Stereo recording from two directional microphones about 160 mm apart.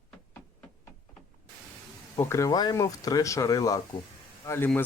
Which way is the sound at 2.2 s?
15° left (ahead or behind).